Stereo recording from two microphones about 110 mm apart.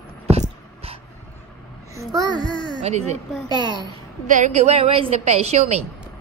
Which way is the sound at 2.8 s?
85° right.